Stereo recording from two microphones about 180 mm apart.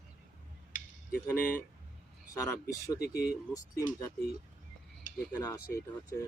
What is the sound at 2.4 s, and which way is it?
Speech, 15° left (ahead or behind).